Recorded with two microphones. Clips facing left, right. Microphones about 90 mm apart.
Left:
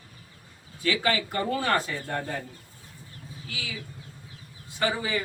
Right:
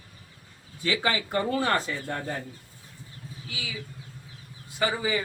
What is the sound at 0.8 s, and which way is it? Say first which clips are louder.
Speech: left 1 dB; 25° right (ahead or behind).